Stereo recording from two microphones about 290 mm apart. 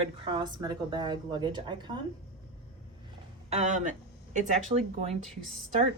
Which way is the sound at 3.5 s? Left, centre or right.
Right.